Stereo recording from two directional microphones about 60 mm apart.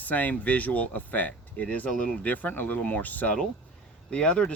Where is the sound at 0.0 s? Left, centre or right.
Left.